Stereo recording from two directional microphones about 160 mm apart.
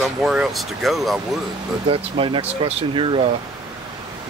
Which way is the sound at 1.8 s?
35° right (ahead or behind).